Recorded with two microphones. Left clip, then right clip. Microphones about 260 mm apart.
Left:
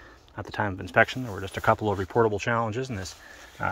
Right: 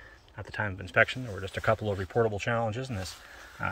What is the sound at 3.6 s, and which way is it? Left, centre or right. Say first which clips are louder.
Pig: left 4 dB; centre.